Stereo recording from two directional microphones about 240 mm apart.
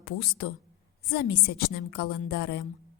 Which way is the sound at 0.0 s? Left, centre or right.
Left.